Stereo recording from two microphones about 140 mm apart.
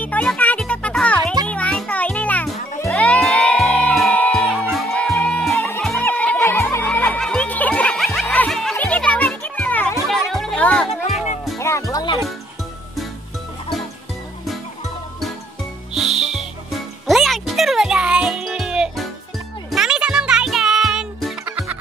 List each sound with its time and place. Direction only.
0.0 s music: 10° left (ahead or behind)
10.0 s music: centre (ahead or behind)
11.5 s music: 20° left (ahead or behind)
15.9 s whistle: centre (ahead or behind)
17.0 s music: centre (ahead or behind)
21.5 s music: 15° right (ahead or behind)